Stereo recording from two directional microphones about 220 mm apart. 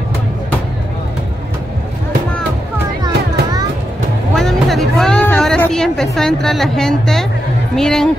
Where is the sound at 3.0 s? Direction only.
20° right (ahead or behind).